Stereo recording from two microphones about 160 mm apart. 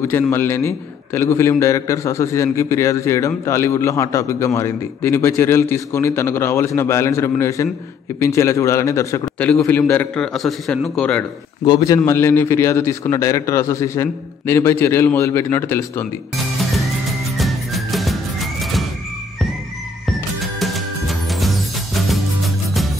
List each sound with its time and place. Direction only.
0.0 s a man's voice: 15° left (ahead or behind)
11.6 s a man's voice: 25° left (ahead or behind)
17.4 s music: centre (ahead or behind)
20.1 s music: centre (ahead or behind)